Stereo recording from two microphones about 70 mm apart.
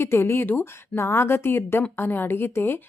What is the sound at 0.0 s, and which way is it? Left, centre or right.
Speech, left.